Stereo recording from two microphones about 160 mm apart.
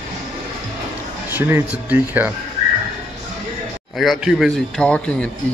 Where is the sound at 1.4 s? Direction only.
15° right (ahead or behind).